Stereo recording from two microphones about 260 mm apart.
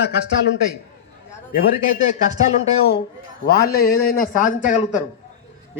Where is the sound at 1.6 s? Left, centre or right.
Left.